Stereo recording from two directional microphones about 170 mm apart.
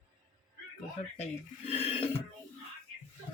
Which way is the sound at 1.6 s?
35° left (ahead or behind).